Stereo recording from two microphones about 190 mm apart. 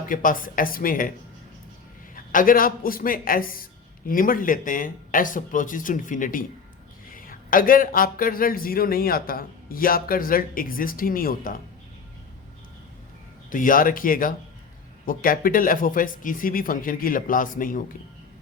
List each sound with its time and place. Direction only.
0.0 s speech: 45° left (ahead or behind)
2.1 s speech: 45° left (ahead or behind)
13.5 s speech: 45° left (ahead or behind)